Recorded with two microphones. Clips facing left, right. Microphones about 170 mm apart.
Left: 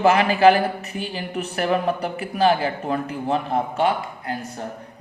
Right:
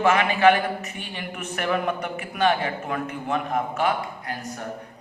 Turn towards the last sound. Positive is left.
turn(degrees=30)  # may be behind; listen again after turning